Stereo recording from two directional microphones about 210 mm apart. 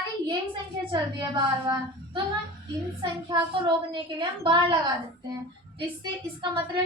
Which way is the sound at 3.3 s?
20° right (ahead or behind).